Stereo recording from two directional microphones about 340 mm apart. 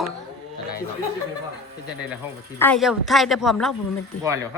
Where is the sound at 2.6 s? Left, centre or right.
Centre.